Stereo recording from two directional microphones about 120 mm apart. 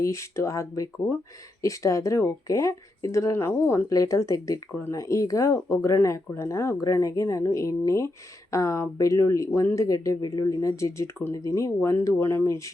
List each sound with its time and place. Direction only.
0.0 s speech: 25° left (ahead or behind)